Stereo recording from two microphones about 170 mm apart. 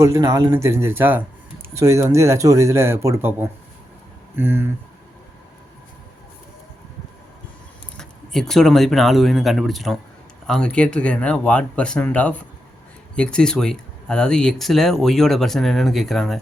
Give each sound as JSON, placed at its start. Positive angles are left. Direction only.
{"t": 0.0, "sound": "speech", "side_deg": -20}
{"t": 7.9, "sound": "speech", "side_deg": 0}